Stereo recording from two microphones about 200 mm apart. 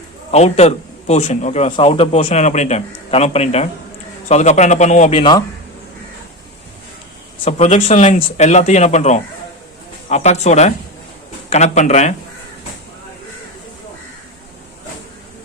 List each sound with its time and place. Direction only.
0.3 s a man's voice: 30° left (ahead or behind)
7.4 s a man's voice: 30° left (ahead or behind)